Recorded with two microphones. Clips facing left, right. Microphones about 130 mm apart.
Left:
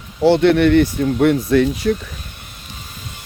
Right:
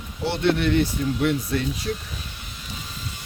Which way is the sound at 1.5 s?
90° left.